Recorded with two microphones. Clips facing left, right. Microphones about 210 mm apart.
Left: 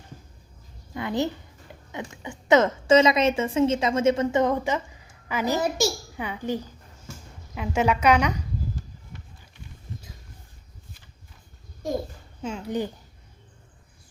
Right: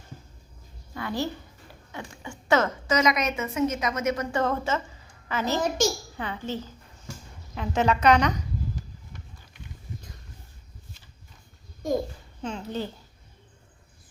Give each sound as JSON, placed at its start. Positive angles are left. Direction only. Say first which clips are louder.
{"t": 0.9, "sound": "a sound", "louder": "left 4 dB", "side_deg": 20}
{"t": 1.9, "sound": "a woman's voice", "louder": "left 3 dB", "side_deg": 20}
{"t": 12.4, "sound": "a child's voice", "louder": "left 3 dB", "side_deg": 5}